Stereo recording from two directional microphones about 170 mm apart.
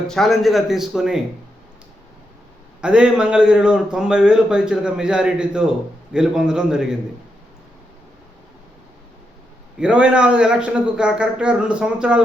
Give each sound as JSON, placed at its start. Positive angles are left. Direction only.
{"t": 0.1, "sound": "a man's voice", "side_deg": 0}
{"t": 2.8, "sound": "a man's voice", "side_deg": -5}
{"t": 9.7, "sound": "a man's voice", "side_deg": -5}